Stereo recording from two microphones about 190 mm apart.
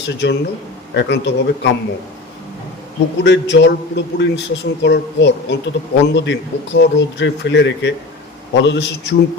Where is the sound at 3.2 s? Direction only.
65° left (ahead or behind).